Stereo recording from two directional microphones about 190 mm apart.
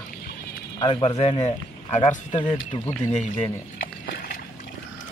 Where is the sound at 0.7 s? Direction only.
25° left (ahead or behind).